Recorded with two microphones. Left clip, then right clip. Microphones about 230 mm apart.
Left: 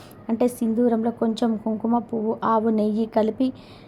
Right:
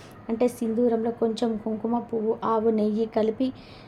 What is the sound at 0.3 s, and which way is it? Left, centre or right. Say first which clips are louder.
A woman's voice: left 2 dB; centre.